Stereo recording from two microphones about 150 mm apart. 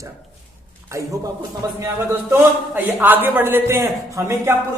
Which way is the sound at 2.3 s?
10° right (ahead or behind).